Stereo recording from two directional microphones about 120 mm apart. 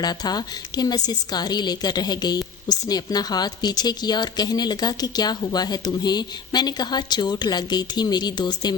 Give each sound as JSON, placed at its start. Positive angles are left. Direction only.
{"t": 0.0, "sound": "a woman's voice", "side_deg": 35}